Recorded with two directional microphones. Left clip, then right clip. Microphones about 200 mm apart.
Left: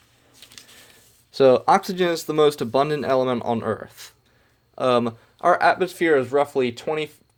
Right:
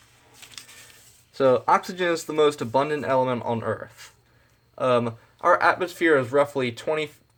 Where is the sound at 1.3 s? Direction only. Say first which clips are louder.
Left 4 dB; 40° left (ahead or behind).